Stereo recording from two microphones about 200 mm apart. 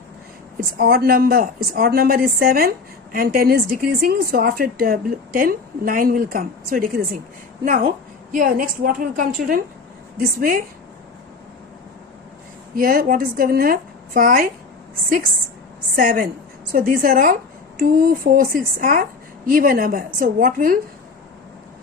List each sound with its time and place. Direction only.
0.5 s speech: 50° right (ahead or behind)
8.3 s speech: 45° right (ahead or behind)
12.7 s speech: 45° right (ahead or behind)
16.0 s speech: 45° right (ahead or behind)